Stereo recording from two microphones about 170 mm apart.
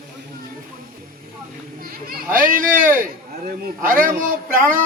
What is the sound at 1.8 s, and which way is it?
Children playing, 55° right (ahead or behind).